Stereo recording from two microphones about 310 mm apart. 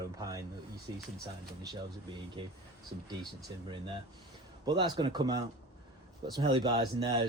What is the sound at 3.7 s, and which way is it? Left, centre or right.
Speech, centre.